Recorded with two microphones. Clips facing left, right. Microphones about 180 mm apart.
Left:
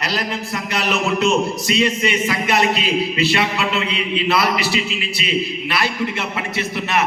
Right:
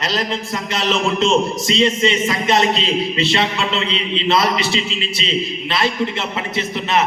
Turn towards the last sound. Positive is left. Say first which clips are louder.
# right 2 dB
turn(degrees=-20)  # may be behind; listen again after turning